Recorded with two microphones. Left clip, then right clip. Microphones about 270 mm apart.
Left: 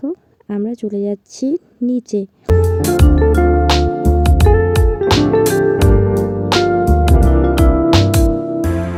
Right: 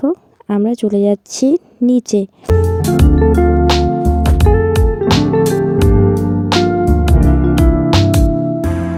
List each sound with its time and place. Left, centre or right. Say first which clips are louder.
0.5 s speech: right 6 dB; right
2.5 s music: left 1 dB; centre